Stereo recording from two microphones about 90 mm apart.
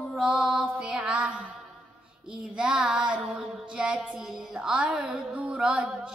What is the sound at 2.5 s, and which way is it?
Child singing, 5° right (ahead or behind).